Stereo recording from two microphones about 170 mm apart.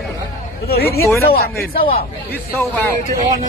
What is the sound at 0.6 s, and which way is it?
Speech, 65° left (ahead or behind).